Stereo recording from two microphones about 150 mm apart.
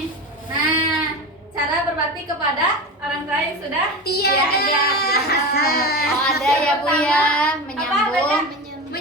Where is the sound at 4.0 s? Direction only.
90° left.